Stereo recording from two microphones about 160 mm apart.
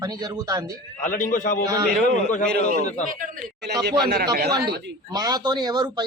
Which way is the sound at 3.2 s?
75° right (ahead or behind).